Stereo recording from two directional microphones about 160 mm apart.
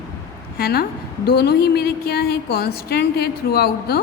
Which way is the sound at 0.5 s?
75° left (ahead or behind).